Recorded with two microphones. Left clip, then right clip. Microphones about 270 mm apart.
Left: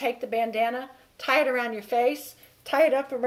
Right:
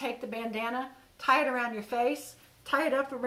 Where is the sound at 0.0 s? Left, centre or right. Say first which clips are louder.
Left 9 dB; centre.